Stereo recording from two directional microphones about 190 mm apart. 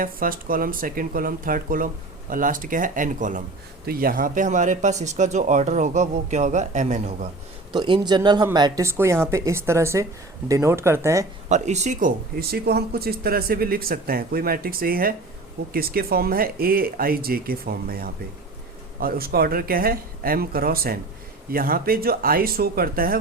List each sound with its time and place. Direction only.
0.0 s speech: 50° right (ahead or behind)
7.7 s speech: 25° right (ahead or behind)
11.4 s speech: 40° right (ahead or behind)